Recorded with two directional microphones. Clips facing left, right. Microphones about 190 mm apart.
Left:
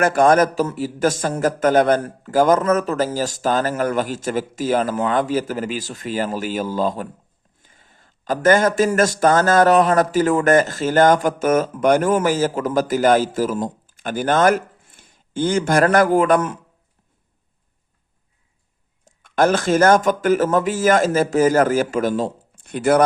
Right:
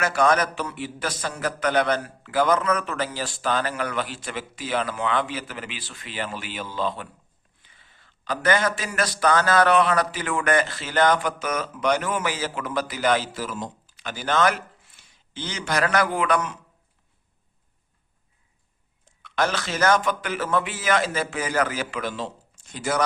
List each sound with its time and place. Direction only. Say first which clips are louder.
0.0 s speech: left 7 dB; 50° left (ahead or behind)
19.0 s speech: left 8 dB; 50° left (ahead or behind)